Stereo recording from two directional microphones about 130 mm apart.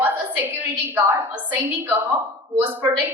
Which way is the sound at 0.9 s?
15° right (ahead or behind).